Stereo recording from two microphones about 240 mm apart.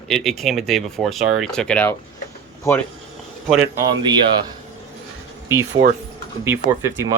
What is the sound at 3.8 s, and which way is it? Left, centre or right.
Speech, centre.